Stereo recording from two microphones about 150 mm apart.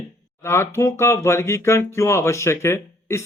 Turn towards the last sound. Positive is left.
turn(degrees=15)  # may be behind; listen again after turning